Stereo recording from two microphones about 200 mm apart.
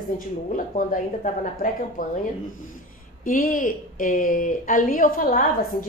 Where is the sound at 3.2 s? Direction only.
45° left (ahead or behind).